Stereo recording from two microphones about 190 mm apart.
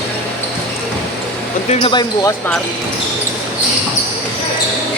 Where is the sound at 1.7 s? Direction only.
25° left (ahead or behind).